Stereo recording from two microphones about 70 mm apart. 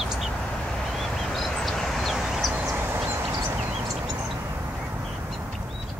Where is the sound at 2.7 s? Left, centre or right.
Right.